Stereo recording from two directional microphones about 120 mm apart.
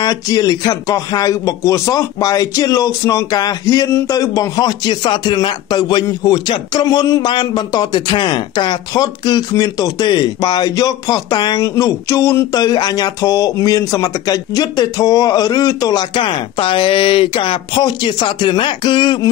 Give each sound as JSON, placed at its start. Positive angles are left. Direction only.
{"t": 0.0, "sound": "speech", "side_deg": 30}